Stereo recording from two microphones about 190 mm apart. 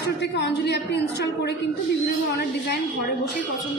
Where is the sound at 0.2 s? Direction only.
65° left (ahead or behind).